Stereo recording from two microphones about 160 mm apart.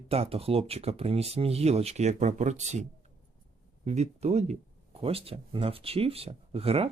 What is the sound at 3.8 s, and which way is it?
Speech, 45° right (ahead or behind).